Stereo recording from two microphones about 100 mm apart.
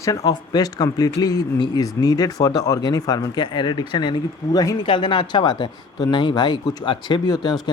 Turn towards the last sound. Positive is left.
turn(degrees=45)  # may be behind; listen again after turning